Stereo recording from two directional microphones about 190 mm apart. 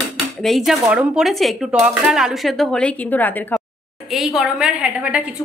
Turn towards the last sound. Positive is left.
turn(degrees=-5)  # may be behind; listen again after turning